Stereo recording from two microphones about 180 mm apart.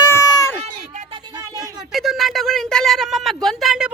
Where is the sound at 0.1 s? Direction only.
15° left (ahead or behind).